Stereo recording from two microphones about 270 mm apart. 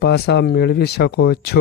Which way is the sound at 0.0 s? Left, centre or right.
Left.